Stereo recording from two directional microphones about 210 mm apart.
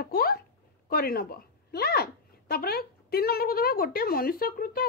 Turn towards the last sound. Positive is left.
turn(degrees=45)  # may be behind; listen again after turning